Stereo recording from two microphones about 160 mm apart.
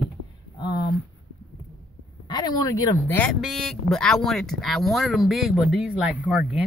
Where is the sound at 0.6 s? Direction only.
25° left (ahead or behind).